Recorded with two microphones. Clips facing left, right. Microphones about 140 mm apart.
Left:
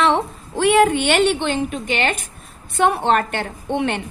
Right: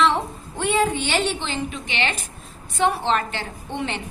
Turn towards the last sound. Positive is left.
turn(degrees=60)  # may be behind; listen again after turning